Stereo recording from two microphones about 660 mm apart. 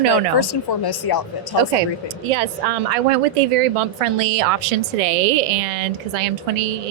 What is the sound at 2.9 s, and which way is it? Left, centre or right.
Speech, right.